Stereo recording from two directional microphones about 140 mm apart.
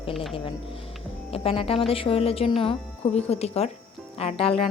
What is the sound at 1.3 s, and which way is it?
Speech, 45° left (ahead or behind).